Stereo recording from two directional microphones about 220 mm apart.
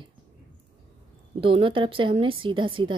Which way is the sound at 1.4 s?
25° right (ahead or behind).